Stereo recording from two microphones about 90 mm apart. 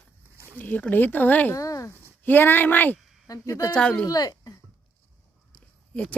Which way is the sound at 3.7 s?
10° left (ahead or behind).